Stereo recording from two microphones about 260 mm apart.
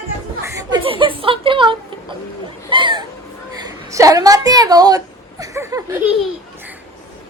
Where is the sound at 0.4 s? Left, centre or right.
Centre.